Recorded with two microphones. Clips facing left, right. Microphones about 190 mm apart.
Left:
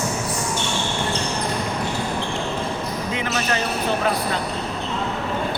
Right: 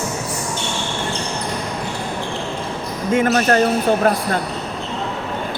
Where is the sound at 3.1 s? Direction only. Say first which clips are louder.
Right 11 dB; 50° right (ahead or behind).